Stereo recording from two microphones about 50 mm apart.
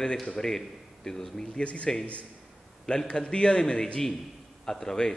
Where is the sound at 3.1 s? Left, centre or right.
Centre.